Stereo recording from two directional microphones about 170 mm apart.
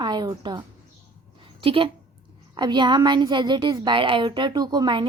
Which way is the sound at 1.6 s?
30° right (ahead or behind).